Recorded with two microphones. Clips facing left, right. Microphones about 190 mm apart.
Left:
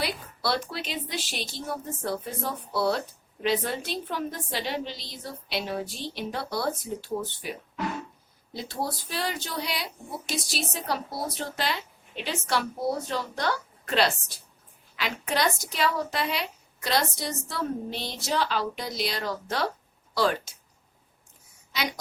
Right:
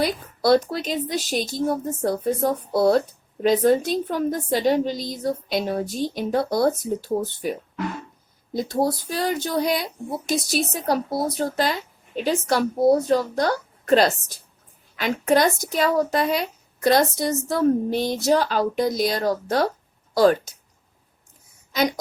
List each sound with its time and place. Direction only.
0.0 s speech: 45° right (ahead or behind)
8.5 s a woman's voice: 45° right (ahead or behind)